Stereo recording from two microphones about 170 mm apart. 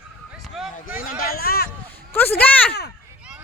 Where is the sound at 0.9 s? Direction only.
55° left (ahead or behind).